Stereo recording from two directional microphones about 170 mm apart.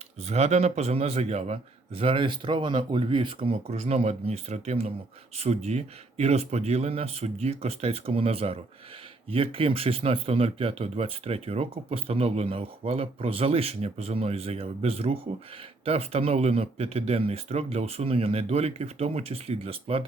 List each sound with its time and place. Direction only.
0.3 s speech: 40° right (ahead or behind)